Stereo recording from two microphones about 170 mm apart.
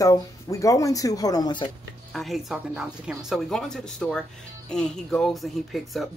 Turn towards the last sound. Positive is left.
turn(degrees=0)  # may be behind; listen again after turning